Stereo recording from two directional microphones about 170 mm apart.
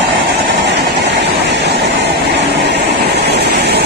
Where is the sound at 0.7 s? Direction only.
90° right.